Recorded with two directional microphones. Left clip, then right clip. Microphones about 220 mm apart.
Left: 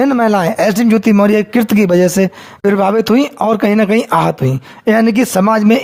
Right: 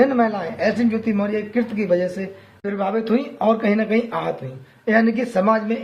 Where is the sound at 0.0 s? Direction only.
50° left (ahead or behind).